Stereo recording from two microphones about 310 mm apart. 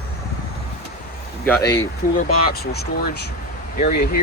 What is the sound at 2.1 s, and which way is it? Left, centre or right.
Speech, left.